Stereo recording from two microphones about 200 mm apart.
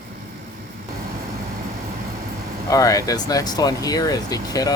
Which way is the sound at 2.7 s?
15° left (ahead or behind).